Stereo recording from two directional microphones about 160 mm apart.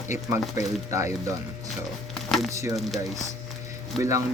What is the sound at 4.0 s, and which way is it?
Speech, 20° right (ahead or behind).